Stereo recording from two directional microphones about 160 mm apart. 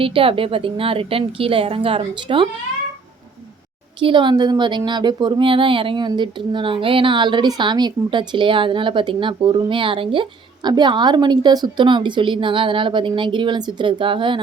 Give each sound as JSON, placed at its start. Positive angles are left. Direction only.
{"t": 0.0, "sound": "speech", "side_deg": -35}
{"t": 4.0, "sound": "a woman's voice", "side_deg": -30}